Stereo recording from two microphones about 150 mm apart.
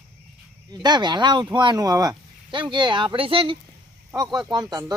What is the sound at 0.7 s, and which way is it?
Speech, 30° right (ahead or behind).